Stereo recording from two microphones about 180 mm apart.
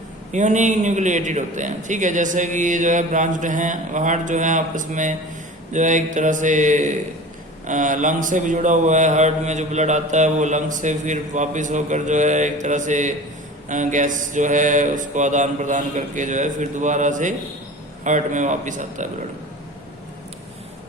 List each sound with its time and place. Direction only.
0.3 s speech: 40° right (ahead or behind)